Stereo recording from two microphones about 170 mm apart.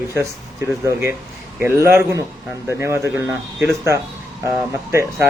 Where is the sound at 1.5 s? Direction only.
15° right (ahead or behind).